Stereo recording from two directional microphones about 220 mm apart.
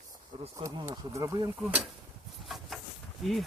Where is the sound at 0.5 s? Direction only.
15° right (ahead or behind).